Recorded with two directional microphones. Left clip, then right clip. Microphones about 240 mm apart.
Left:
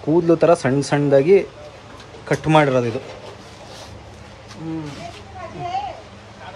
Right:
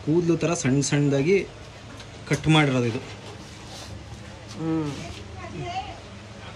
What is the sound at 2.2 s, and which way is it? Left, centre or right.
Speech, centre.